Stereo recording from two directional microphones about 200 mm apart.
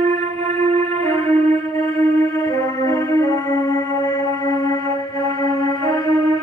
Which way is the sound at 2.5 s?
15° left (ahead or behind).